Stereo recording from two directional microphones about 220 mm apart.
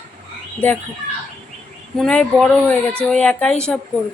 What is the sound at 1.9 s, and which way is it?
A woman's voice, 5° left (ahead or behind).